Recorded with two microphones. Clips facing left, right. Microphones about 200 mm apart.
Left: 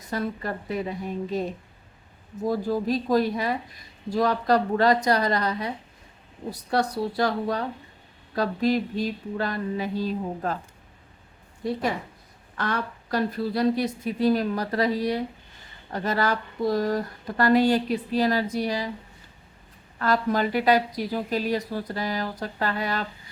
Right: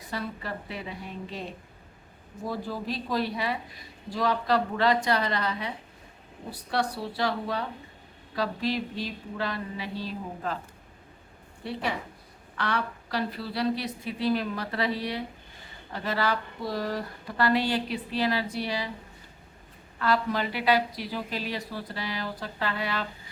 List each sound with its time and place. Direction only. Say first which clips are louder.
0.1 s a woman's voice: left 5 dB; 45° left (ahead or behind)
11.6 s a woman's voice: left 5 dB; 40° left (ahead or behind)
20.0 s a woman's voice: left 3 dB; 45° left (ahead or behind)